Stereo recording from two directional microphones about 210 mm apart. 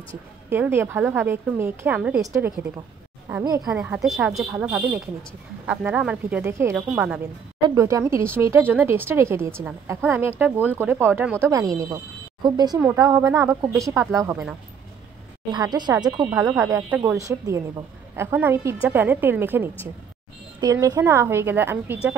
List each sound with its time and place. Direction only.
0.5 s speech: 10° right (ahead or behind)
15.5 s speech: 20° right (ahead or behind)